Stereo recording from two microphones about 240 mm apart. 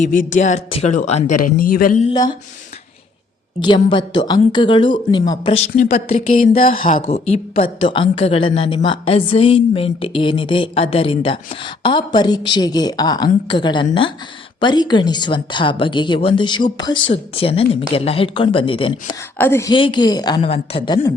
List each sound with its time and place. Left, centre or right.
0.0 s speech: left
3.6 s a woman's voice: centre
19.4 s a woman's voice: centre